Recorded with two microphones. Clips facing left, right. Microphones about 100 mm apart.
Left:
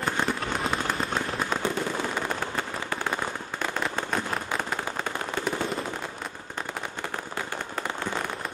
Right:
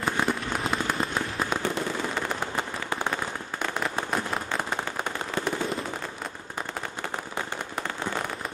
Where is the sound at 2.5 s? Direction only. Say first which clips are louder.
Right 1 dB; 20° right (ahead or behind).